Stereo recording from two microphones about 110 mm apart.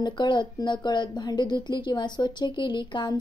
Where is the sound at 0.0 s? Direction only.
45° left (ahead or behind).